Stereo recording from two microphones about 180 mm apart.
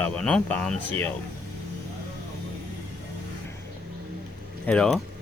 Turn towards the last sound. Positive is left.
turn(degrees=5)  # may be behind; listen again after turning